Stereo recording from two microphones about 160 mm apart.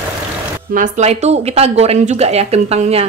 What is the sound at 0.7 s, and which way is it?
Speech, 50° right (ahead or behind).